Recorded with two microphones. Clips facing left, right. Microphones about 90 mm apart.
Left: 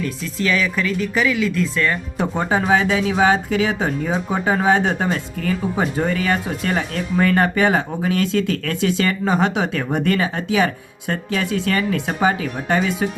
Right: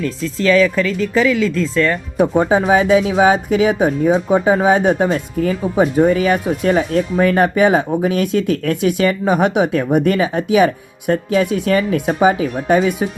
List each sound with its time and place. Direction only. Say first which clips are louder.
0.3 s speech: right 7 dB; 35° right (ahead or behind)
2.1 s speech: right 9 dB; 10° right (ahead or behind)